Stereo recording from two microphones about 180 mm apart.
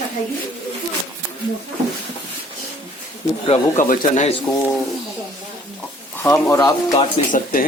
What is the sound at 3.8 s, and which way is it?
Speech, 45° left (ahead or behind).